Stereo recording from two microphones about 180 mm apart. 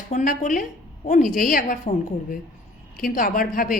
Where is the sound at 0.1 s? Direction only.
45° left (ahead or behind).